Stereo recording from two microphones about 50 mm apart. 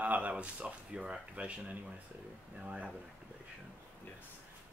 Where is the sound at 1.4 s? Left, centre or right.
Right.